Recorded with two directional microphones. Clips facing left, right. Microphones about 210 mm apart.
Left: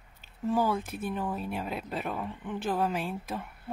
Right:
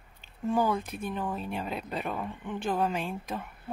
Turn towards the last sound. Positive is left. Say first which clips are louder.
# even
turn(degrees=5)  # may be behind; listen again after turning